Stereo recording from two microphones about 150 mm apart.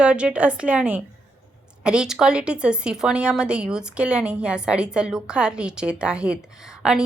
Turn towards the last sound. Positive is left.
turn(degrees=-5)  # may be behind; listen again after turning